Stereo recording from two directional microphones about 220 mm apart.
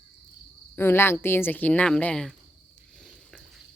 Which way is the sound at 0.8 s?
10° left (ahead or behind).